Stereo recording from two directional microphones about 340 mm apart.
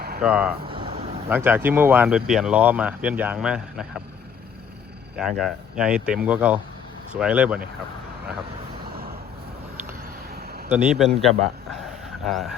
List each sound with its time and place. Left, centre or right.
0.2 s speech: centre
0.6 s speech: centre
5.1 s speech: centre
10.3 s a sound: right
10.7 s speech: centre